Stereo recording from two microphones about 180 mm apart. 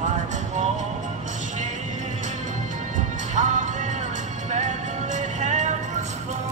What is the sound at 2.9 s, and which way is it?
Music, 45° right (ahead or behind).